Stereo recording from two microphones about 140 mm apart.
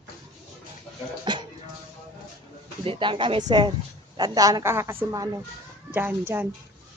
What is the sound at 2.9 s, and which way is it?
A woman's voice, 35° right (ahead or behind).